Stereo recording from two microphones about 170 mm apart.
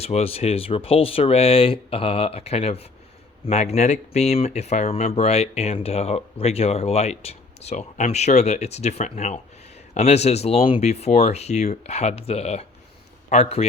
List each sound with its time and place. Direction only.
0.0 s speech: 35° left (ahead or behind)